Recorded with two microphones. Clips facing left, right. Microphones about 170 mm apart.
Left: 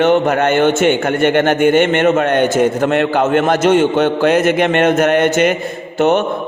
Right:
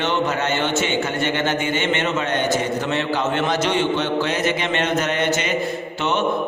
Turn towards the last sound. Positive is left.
turn(degrees=50)  # may be behind; listen again after turning